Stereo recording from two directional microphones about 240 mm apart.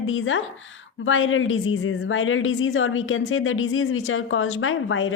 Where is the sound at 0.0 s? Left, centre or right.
Left.